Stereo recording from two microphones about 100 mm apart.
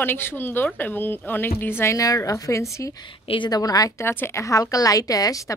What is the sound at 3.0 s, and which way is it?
Speech, 55° left (ahead or behind).